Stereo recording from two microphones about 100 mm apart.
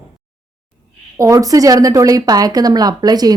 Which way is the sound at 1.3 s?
35° right (ahead or behind).